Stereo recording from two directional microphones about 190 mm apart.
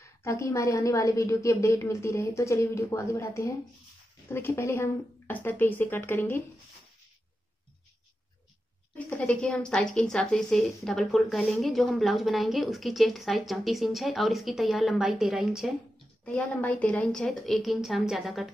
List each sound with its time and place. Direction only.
0.2 s a woman's voice: 15° left (ahead or behind)
8.9 s a woman's voice: 5° left (ahead or behind)